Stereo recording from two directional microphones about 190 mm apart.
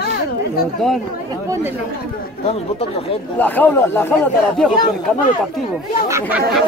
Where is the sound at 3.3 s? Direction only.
10° left (ahead or behind).